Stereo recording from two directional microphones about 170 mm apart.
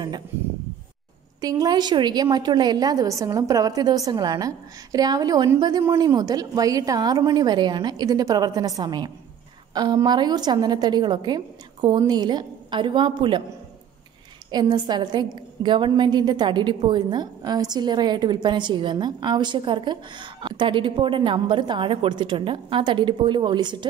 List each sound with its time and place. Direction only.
1.4 s a woman's voice: 20° right (ahead or behind)
14.5 s a woman's voice: 25° right (ahead or behind)